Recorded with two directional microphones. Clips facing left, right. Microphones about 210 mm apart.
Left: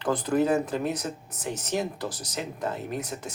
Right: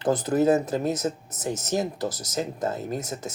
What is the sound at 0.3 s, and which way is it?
Speech, 35° right (ahead or behind).